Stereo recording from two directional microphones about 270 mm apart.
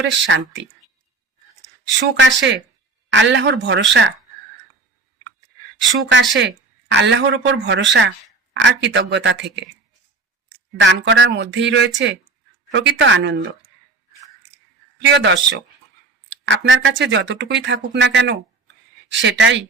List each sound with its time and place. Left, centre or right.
0.0 s speech: right
2.0 s speech: right
5.9 s speech: right
10.8 s speech: right
15.0 s speech: right